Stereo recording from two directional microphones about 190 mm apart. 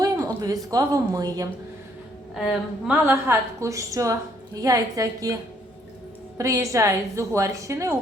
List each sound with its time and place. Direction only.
0.0 s a woman's voice: 20° right (ahead or behind)
2.3 s a woman's voice: centre (ahead or behind); by 7.9 s 15° right (ahead or behind)